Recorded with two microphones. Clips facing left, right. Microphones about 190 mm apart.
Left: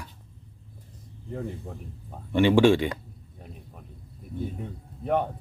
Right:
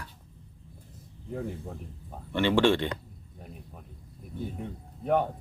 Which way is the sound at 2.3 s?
15° left (ahead or behind).